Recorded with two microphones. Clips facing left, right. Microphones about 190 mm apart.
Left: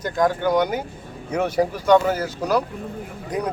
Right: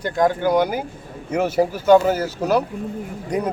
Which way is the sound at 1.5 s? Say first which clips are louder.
Right 3 dB; 25° right (ahead or behind).